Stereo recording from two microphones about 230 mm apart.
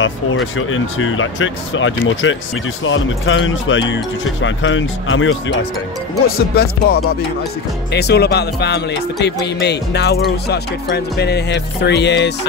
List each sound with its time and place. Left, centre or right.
0.0 s speech: left
6.2 s speech: left